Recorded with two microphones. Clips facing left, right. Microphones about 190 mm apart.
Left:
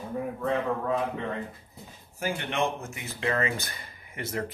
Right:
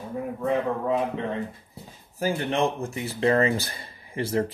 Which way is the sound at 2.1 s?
35° right (ahead or behind).